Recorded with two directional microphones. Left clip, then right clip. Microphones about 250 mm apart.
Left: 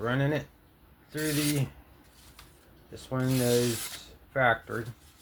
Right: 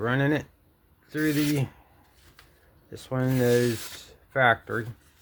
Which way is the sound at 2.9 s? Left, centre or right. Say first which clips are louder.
Right 3 dB; right.